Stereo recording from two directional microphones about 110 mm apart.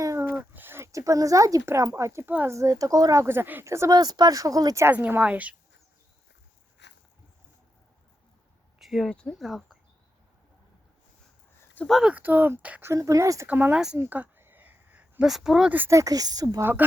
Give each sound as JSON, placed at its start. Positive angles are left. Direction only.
{"t": 0.0, "sound": "a sound", "side_deg": -30}
{"t": 0.5, "sound": "speech", "side_deg": -20}
{"t": 3.9, "sound": "speech", "side_deg": -40}
{"t": 8.8, "sound": "speech", "side_deg": 0}
{"t": 11.9, "sound": "speech", "side_deg": 0}
{"t": 12.1, "sound": "speech", "side_deg": -15}
{"t": 12.9, "sound": "speech", "side_deg": -30}
{"t": 13.5, "sound": "speech", "side_deg": -15}
{"t": 14.1, "sound": "a sound", "side_deg": -20}
{"t": 15.3, "sound": "speech", "side_deg": -5}
{"t": 15.9, "sound": "speech", "side_deg": -30}